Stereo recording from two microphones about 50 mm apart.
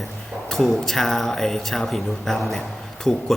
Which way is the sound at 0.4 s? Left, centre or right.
Centre.